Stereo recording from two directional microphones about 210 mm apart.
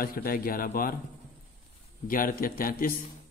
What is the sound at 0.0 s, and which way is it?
Speech, 45° left (ahead or behind).